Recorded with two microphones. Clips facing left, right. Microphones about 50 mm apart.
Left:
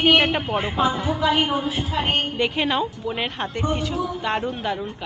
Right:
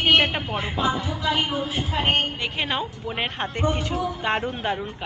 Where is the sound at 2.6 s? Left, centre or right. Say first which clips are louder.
Left 2 dB; centre.